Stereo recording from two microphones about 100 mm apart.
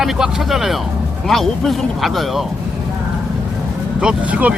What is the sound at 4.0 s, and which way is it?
Speech, 10° right (ahead or behind).